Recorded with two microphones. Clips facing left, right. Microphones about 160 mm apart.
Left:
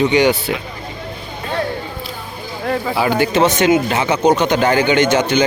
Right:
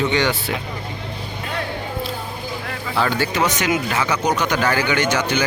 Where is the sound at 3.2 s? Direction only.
25° left (ahead or behind).